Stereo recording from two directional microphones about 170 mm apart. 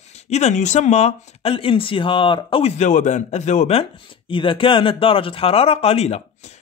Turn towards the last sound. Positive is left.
turn(degrees=40)  # may be behind; listen again after turning